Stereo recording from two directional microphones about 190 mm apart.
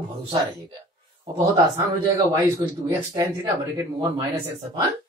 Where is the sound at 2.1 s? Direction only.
20° right (ahead or behind).